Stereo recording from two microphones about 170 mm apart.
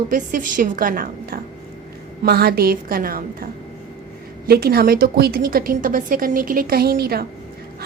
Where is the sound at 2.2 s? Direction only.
65° right (ahead or behind).